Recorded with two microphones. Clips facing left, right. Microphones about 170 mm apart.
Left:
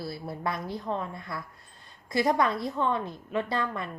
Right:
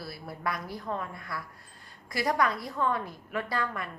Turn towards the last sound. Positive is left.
turn(degrees=25)  # may be behind; listen again after turning